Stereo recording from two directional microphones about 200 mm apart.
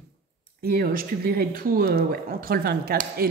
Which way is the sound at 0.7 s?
50° right (ahead or behind).